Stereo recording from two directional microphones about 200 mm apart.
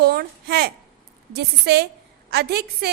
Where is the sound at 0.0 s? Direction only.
50° right (ahead or behind).